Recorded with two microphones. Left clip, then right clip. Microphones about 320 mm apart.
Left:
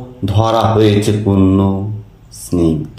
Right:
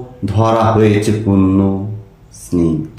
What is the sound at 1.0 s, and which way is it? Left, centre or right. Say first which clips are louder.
Speech: left 1 dB; centre.